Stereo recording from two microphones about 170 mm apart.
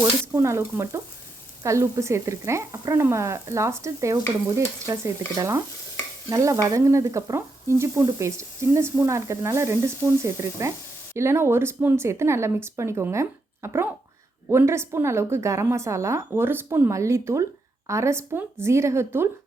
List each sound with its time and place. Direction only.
0.3 s stir: 15° right (ahead or behind)